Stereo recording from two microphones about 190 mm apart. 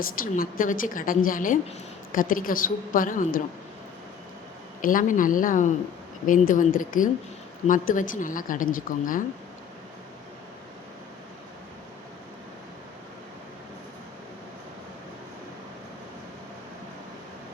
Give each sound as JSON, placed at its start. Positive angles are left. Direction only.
{"t": 0.0, "sound": "a woman's voice", "side_deg": 50}
{"t": 4.8, "sound": "a woman's voice", "side_deg": 45}